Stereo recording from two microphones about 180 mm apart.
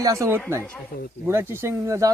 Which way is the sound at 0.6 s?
10° left (ahead or behind).